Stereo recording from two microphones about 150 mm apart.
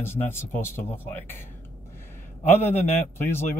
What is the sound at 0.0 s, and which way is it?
A man's voice, 15° left (ahead or behind).